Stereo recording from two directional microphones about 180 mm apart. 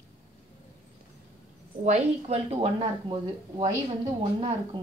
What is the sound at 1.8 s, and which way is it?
Speech, 35° right (ahead or behind).